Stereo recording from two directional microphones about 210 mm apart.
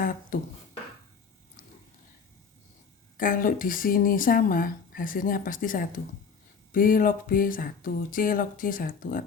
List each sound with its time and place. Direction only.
0.0 s beatboxing: 40° left (ahead or behind)
3.2 s speech: 40° left (ahead or behind)